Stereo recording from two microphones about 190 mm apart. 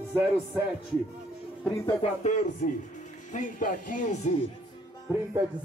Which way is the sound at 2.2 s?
40° left (ahead or behind).